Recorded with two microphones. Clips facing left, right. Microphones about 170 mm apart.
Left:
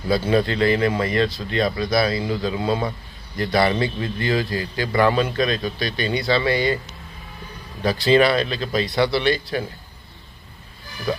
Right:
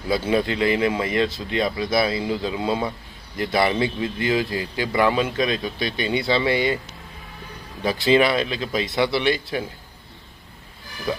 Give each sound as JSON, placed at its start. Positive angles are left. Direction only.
{"t": 0.1, "sound": "speech", "side_deg": -15}
{"t": 7.8, "sound": "speech", "side_deg": -15}